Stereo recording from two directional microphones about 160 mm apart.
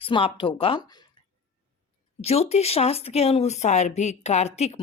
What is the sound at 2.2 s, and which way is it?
Speech, 40° left (ahead or behind).